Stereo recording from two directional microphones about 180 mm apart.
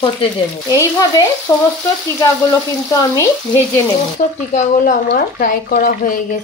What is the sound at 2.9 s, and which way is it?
Speech, 20° left (ahead or behind).